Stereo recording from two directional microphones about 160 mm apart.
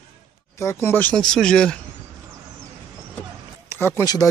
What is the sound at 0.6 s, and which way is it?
Speech, 15° left (ahead or behind).